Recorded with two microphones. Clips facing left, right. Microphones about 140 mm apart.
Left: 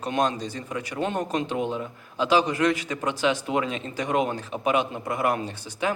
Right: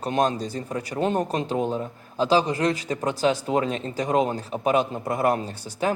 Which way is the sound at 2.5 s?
25° right (ahead or behind).